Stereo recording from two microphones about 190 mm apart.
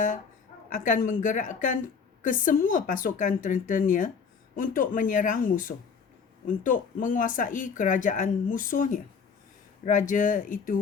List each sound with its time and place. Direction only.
0.9 s speech: 45° left (ahead or behind)